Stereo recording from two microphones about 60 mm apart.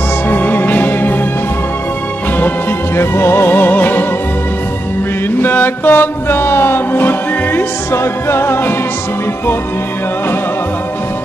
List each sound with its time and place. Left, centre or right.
0.3 s music: left
3.0 s music: left
5.4 s music: left